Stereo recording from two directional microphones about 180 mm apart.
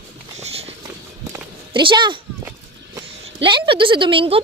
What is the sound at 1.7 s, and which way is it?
Speech, 25° right (ahead or behind).